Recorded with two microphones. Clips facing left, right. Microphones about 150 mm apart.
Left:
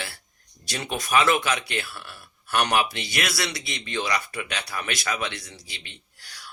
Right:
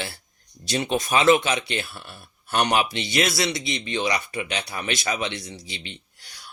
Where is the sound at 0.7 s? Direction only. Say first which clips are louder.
Right 4 dB; 25° right (ahead or behind).